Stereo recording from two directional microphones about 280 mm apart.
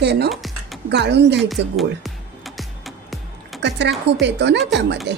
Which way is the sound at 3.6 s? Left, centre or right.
Right.